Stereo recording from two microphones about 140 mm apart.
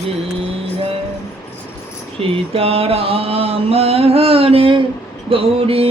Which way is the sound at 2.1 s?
45° right (ahead or behind).